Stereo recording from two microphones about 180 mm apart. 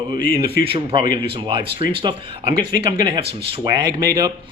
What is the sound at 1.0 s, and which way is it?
Speech, 55° left (ahead or behind).